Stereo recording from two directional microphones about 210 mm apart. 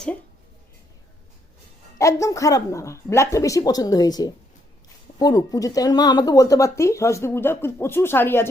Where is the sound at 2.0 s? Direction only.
15° left (ahead or behind).